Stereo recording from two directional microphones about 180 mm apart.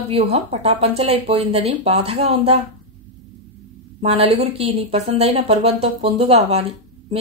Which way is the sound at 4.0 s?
35° right (ahead or behind).